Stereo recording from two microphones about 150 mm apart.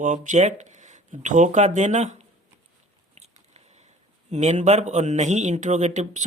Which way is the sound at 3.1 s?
45° right (ahead or behind).